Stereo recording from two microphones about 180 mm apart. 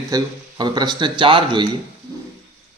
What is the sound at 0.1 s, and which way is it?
Speech, 20° right (ahead or behind).